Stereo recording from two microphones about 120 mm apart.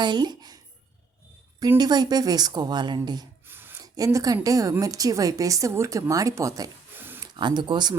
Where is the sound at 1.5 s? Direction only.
35° right (ahead or behind).